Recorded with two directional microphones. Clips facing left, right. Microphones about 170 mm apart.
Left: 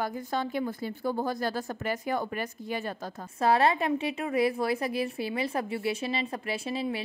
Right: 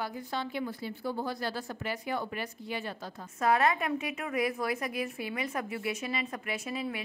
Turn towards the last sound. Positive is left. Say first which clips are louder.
# left 4 dB
turn(degrees=30)  # may be behind; listen again after turning